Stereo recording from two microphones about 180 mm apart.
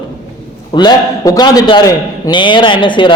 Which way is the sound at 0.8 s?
20° left (ahead or behind).